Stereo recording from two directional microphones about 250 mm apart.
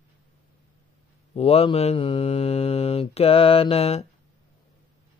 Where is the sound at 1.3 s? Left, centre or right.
Left.